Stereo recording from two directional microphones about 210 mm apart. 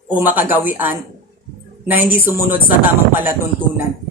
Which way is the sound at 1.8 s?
10° right (ahead or behind).